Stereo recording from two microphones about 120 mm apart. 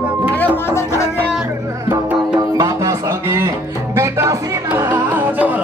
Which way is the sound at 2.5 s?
30° right (ahead or behind).